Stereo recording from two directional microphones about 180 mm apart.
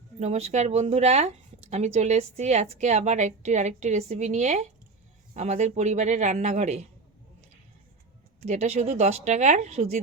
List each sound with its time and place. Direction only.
0.2 s a woman's voice: 35° right (ahead or behind)
8.4 s a woman's voice: 35° right (ahead or behind)